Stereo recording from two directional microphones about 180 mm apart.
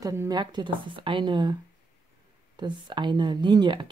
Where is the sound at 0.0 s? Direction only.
15° right (ahead or behind).